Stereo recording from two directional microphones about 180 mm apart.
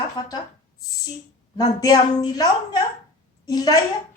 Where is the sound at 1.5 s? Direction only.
25° left (ahead or behind).